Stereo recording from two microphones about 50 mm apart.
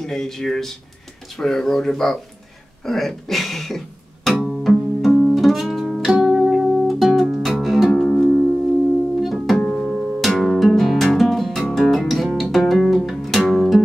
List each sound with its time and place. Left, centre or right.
0.0 s speech: centre
2.8 s music: centre
6.0 s music: centre
8.1 s music: centre
9.2 s music: centre
9.6 s music: left
9.8 s music: centre